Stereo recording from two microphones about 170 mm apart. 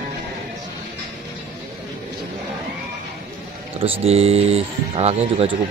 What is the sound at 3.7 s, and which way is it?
Speech, 35° right (ahead or behind).